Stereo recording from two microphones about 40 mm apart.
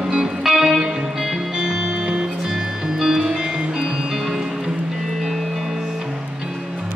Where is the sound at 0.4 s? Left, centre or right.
Centre.